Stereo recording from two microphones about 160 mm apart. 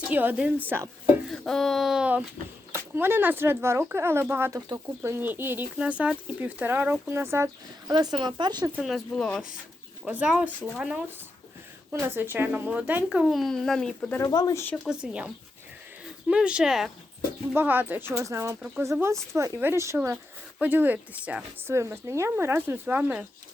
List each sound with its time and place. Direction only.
0.1 s speech: 10° right (ahead or behind)
1.3 s speech: centre (ahead or behind); by 8.7 s 25° right (ahead or behind)
8.7 s speech: centre (ahead or behind)
10.0 s speech: 5° right (ahead or behind)
12.0 s speech: 15° right (ahead or behind); by 14.2 s 5° left (ahead or behind)
14.2 s speech: 25° left (ahead or behind)
14.8 s speech: 5° right (ahead or behind)
16.3 s speech: 5° right (ahead or behind)